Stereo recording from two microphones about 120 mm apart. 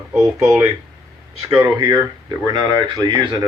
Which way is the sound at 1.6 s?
35° right (ahead or behind).